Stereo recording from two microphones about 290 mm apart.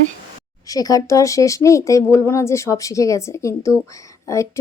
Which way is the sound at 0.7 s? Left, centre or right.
Centre.